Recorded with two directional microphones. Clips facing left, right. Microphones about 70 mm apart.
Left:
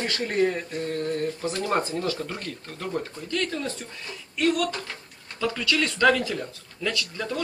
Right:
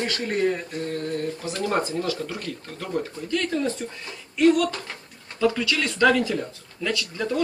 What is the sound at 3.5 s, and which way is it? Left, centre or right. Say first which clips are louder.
Speech: right 6 dB; centre.